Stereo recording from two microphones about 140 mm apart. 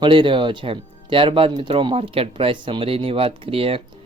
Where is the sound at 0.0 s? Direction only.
35° right (ahead or behind).